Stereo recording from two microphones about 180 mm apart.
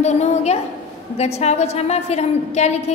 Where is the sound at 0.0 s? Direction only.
40° left (ahead or behind).